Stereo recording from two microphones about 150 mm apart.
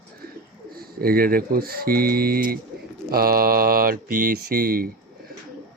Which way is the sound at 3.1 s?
85° right.